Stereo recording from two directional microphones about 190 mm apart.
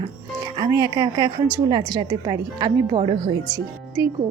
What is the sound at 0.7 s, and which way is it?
A woman's voice, 20° right (ahead or behind).